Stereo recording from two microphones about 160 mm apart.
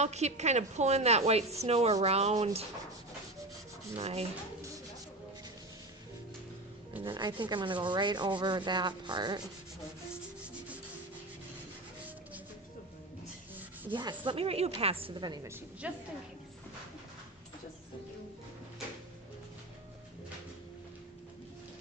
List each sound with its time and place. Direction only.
0.0 s speech: 45° right (ahead or behind)
3.9 s speech: 40° right (ahead or behind)
7.0 s rub: 30° right (ahead or behind)
13.9 s speech: 30° right (ahead or behind)
15.8 s a woman's voice: 10° right (ahead or behind)